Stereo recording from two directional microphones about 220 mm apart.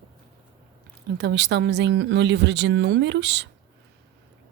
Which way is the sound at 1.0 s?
50° right (ahead or behind).